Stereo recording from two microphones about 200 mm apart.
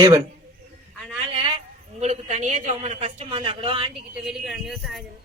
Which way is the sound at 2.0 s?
35° right (ahead or behind).